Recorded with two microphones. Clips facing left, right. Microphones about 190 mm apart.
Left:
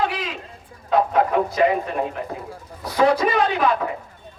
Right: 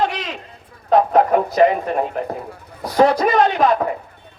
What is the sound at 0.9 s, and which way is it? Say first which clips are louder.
Music: right 5 dB; 45° right (ahead or behind).